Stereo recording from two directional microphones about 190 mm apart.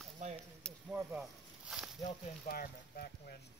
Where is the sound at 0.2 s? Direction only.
40° right (ahead or behind).